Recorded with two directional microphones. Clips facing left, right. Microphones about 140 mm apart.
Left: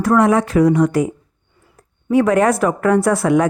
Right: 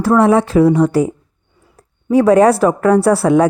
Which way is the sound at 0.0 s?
30° right (ahead or behind).